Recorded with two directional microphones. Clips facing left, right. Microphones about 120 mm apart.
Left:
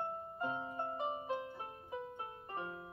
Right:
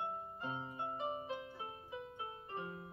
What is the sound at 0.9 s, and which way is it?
Music, 30° left (ahead or behind).